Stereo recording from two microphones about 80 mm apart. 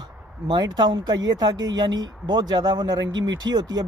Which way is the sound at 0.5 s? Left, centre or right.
Right.